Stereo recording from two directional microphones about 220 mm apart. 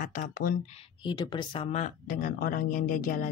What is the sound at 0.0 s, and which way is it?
Speech, 40° left (ahead or behind).